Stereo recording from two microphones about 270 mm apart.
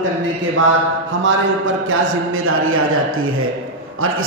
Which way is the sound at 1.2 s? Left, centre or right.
Right.